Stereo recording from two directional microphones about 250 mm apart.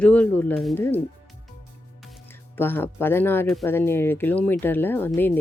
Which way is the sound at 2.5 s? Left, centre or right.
Centre.